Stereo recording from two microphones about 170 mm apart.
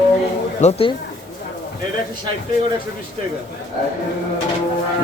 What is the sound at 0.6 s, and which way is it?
Speech, 35° left (ahead or behind).